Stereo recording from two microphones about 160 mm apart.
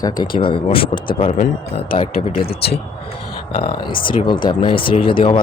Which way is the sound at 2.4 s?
80° left.